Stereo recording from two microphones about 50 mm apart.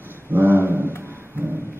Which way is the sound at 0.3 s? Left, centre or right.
Right.